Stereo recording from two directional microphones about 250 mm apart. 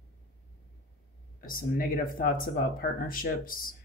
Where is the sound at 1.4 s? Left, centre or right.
Left.